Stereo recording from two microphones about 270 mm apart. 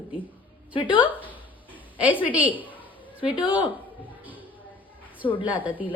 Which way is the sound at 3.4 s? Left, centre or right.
Centre.